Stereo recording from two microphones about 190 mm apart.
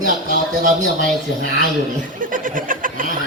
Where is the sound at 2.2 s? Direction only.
45° right (ahead or behind).